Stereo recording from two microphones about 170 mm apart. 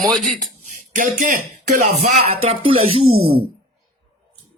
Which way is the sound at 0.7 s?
55° right (ahead or behind).